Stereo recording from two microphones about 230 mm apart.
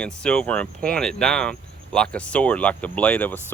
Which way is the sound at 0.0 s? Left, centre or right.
Centre.